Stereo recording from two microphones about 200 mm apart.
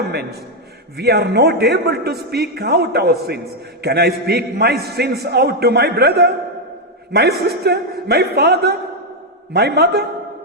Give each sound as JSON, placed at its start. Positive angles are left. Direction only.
{"t": 0.1, "sound": "a man's voice", "side_deg": -55}